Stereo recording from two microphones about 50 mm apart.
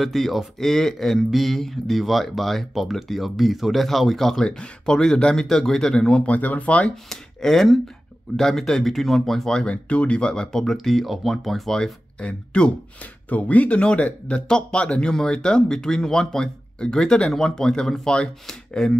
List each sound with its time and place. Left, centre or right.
0.0 s speech: centre
6.2 s speech: left
6.8 s speech: centre
10.6 s speech: centre
12.2 s speech: left